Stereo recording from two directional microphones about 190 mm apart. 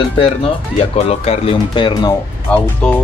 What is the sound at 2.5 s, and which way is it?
Speech, 5° left (ahead or behind).